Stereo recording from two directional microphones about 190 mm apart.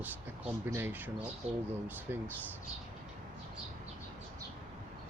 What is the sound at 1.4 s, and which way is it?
Speech, 30° right (ahead or behind).